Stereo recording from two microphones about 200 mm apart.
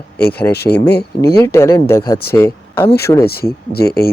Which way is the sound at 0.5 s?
50° left (ahead or behind).